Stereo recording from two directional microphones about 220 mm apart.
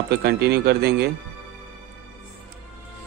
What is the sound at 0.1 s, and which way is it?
A man's voice, 50° right (ahead or behind).